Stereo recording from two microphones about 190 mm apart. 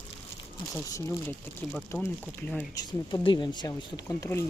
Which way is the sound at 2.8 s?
20° left (ahead or behind).